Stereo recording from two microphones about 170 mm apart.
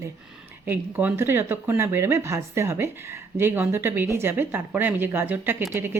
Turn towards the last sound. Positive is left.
turn(degrees=-10)  # may be behind; listen again after turning